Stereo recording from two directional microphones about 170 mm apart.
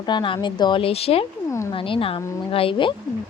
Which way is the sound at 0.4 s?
25° left (ahead or behind).